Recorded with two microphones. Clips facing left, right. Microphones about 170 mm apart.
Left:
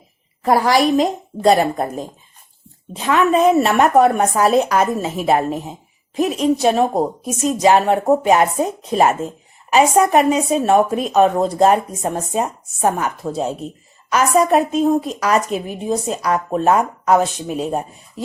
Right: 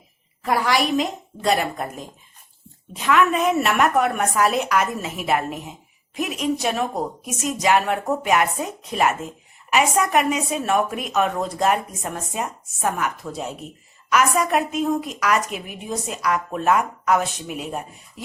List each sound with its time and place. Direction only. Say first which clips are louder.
0.4 s a woman's voice: left 6 dB; 40° left (ahead or behind)